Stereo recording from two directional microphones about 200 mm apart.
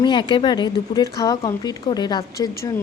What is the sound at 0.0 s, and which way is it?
Speech, 20° left (ahead or behind).